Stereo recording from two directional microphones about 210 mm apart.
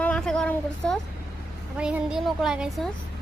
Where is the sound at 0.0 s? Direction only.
5° left (ahead or behind).